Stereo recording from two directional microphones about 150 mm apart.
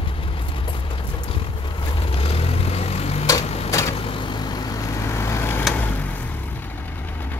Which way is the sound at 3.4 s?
45° left (ahead or behind).